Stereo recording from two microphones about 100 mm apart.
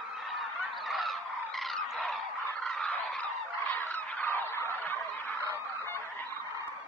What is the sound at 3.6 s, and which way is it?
Fowl, 20° left (ahead or behind).